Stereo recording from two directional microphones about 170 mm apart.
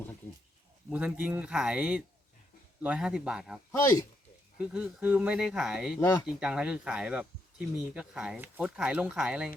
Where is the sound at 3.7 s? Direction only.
20° left (ahead or behind).